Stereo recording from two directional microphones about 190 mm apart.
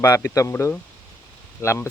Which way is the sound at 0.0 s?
15° left (ahead or behind).